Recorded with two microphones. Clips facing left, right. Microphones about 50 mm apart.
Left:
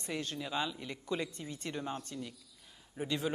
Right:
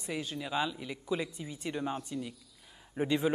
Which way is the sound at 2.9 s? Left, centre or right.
Right.